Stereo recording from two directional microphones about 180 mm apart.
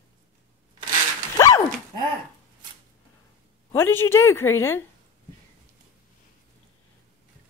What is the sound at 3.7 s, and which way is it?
A woman's voice, 15° left (ahead or behind).